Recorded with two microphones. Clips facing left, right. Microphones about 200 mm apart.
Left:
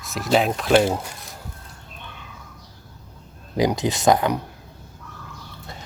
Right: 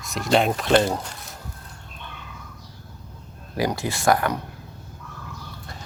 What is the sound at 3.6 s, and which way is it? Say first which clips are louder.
Speech: left 4 dB; 20° left (ahead or behind).